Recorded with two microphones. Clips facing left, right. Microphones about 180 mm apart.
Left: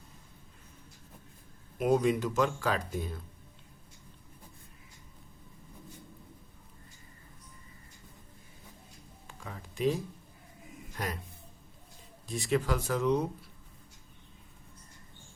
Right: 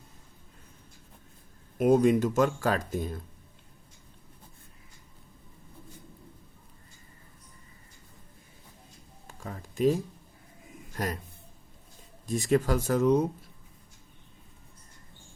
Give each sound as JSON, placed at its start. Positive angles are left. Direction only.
{"t": 1.8, "sound": "speech", "side_deg": -45}
{"t": 9.2, "sound": "a sound", "side_deg": -40}
{"t": 10.9, "sound": "speech", "side_deg": -45}
{"t": 12.2, "sound": "speech", "side_deg": -45}